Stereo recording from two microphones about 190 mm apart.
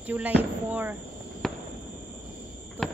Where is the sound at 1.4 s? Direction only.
Centre (ahead or behind).